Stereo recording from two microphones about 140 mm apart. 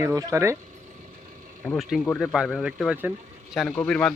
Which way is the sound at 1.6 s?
Centre (ahead or behind).